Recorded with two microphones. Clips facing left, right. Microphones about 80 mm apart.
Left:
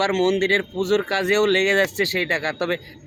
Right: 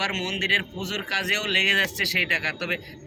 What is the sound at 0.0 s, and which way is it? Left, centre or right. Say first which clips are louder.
Speech: left 10 dB; left.